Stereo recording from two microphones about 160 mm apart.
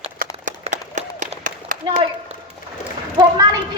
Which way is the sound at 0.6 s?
50° right (ahead or behind).